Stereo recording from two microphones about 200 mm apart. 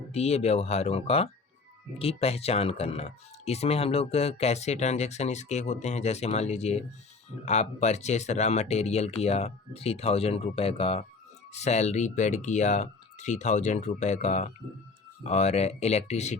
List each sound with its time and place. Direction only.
0.1 s speech: 30° left (ahead or behind)